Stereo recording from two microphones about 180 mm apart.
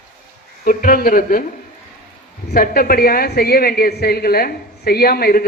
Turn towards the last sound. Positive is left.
turn(degrees=60)  # may be behind; listen again after turning